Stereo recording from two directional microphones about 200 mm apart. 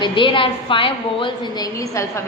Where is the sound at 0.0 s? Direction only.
25° left (ahead or behind).